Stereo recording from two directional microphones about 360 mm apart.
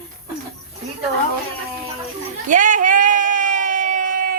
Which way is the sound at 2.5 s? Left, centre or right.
Right.